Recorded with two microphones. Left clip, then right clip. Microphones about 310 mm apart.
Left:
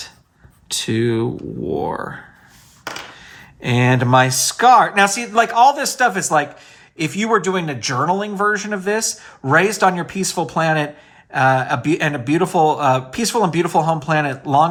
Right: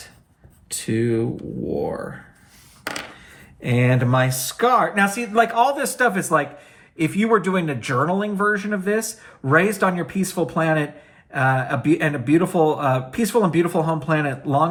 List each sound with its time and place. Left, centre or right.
0.9 s speech: centre
3.6 s speech: centre